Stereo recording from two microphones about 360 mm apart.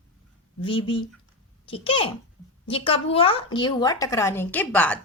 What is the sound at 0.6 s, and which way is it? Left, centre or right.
Speech, centre.